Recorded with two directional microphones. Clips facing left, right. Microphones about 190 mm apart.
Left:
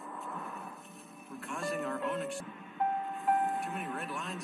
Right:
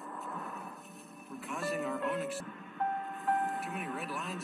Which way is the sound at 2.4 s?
20° left (ahead or behind).